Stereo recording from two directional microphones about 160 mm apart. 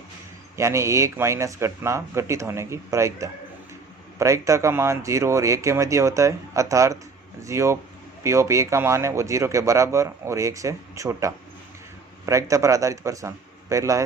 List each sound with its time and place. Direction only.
0.5 s a man's voice: 15° right (ahead or behind)